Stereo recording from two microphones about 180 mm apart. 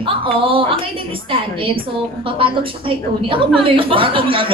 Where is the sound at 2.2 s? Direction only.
30° right (ahead or behind).